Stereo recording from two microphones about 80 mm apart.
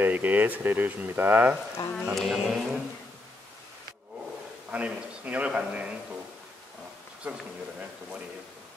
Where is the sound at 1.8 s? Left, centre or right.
Left.